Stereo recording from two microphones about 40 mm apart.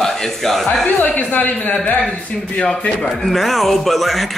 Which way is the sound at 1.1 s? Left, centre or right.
Left.